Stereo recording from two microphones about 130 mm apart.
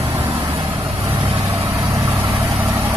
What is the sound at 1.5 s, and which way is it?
Vehicle, 20° right (ahead or behind).